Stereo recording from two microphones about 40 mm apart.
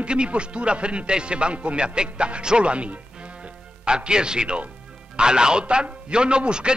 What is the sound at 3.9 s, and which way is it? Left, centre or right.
Speech, right.